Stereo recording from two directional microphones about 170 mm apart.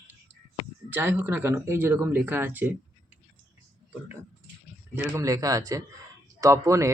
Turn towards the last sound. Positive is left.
turn(degrees=-15)  # may be behind; listen again after turning